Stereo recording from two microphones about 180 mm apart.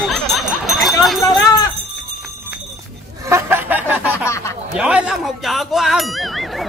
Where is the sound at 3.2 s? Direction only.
15° right (ahead or behind).